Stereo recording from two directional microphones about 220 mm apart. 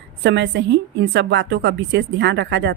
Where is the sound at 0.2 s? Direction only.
50° right (ahead or behind).